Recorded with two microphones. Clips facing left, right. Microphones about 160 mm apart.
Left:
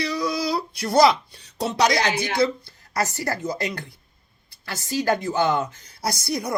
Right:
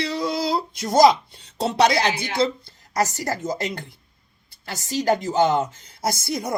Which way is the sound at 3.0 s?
20° right (ahead or behind).